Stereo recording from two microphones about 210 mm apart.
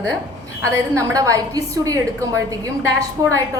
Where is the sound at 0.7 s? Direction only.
15° right (ahead or behind).